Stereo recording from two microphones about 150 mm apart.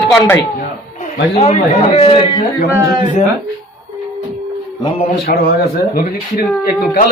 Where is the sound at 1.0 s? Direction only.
45° left (ahead or behind).